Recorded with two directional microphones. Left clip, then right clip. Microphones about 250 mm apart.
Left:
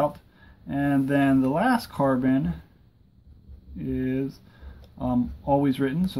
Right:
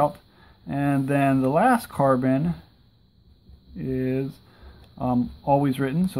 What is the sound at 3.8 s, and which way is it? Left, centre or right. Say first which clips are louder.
Speech: right 2 dB; right.